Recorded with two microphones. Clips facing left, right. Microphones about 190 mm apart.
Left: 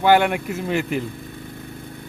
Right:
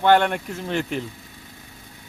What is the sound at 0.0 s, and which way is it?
Speech, 5° left (ahead or behind).